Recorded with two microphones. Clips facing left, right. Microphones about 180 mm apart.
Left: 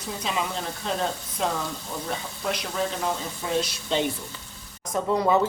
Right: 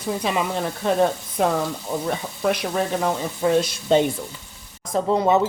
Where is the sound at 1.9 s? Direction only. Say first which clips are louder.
Right 8 dB; 80° right.